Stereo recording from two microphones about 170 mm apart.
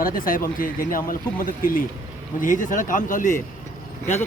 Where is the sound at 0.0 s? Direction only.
55° left (ahead or behind).